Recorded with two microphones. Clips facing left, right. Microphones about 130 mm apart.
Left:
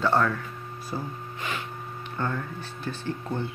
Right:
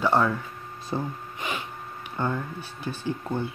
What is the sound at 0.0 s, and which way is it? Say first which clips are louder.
Speech: right 1 dB; 15° right (ahead or behind).